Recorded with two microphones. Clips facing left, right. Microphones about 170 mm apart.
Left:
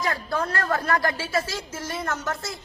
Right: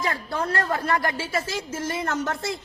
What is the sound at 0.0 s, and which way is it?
A woman's voice, 30° right (ahead or behind).